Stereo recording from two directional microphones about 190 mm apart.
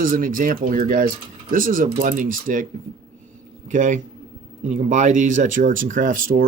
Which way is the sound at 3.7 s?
40° right (ahead or behind).